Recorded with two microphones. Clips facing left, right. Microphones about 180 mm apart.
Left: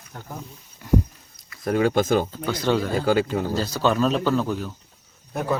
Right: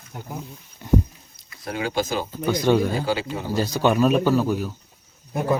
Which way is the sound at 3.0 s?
50° left (ahead or behind).